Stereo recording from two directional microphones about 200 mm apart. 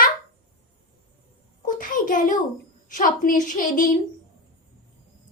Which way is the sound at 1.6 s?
40° left (ahead or behind).